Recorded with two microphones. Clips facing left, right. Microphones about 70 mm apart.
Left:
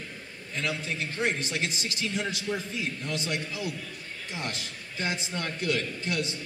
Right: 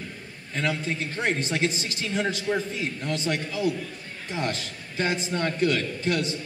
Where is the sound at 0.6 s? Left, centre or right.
Right.